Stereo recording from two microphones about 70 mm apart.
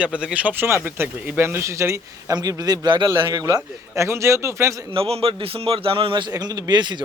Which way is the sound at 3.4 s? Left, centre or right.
Right.